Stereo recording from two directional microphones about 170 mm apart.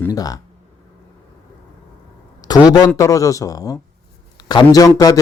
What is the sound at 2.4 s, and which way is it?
Speech, 20° left (ahead or behind).